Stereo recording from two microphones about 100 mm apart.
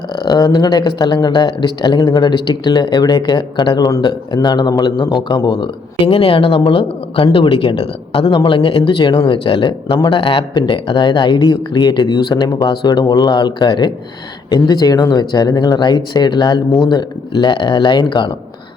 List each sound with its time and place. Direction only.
0.1 s a woman's voice: 50° left (ahead or behind)